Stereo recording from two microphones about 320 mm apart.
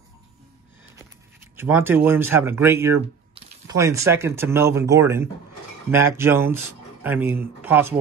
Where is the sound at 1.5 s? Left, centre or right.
Centre.